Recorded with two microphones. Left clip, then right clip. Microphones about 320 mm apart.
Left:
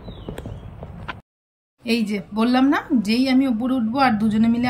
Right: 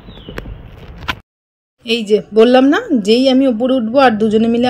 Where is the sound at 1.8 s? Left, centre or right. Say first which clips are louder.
Right 10 dB; centre.